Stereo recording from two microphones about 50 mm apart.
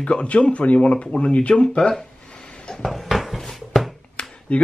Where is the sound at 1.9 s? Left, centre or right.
Centre.